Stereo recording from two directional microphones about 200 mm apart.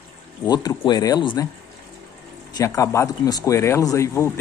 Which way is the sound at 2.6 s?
15° left (ahead or behind).